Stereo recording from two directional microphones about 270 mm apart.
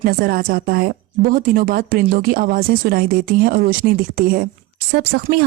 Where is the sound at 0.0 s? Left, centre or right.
Right.